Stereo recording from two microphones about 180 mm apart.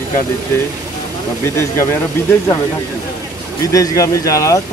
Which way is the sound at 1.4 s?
15° left (ahead or behind).